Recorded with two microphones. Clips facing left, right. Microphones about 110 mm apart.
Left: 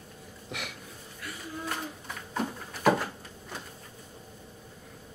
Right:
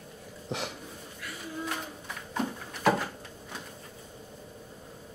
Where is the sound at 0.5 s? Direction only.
30° right (ahead or behind).